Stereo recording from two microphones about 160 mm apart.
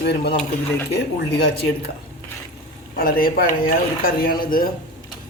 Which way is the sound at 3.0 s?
65° left (ahead or behind).